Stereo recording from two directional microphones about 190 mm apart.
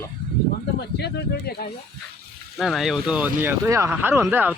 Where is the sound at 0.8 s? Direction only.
60° left (ahead or behind).